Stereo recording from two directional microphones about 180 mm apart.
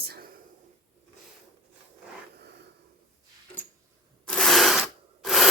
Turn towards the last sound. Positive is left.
turn(degrees=0)  # may be behind; listen again after turning